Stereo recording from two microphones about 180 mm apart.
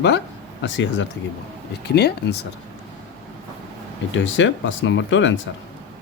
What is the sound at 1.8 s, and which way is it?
Speech, 65° left (ahead or behind).